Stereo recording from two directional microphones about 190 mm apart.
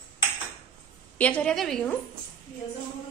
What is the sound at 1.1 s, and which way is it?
Speech, 5° left (ahead or behind).